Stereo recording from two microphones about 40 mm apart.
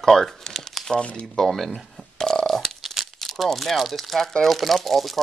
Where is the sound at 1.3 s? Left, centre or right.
Centre.